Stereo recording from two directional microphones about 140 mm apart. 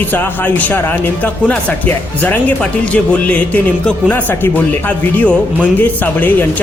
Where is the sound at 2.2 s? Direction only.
10° left (ahead or behind).